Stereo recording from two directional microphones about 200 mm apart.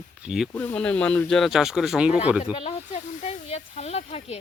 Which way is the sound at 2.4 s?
30° left (ahead or behind).